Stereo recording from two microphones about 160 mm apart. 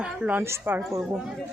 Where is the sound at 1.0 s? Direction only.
5° right (ahead or behind).